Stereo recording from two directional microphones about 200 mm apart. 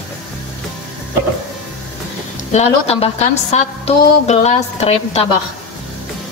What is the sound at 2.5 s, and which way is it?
A woman's voice, 30° left (ahead or behind).